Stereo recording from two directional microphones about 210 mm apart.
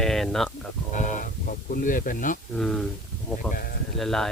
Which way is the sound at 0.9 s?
35° left (ahead or behind).